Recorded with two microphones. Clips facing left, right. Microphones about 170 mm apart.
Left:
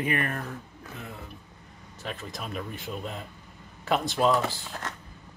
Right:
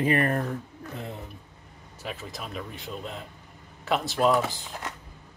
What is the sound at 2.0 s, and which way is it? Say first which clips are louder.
Speech: even; 5° right (ahead or behind).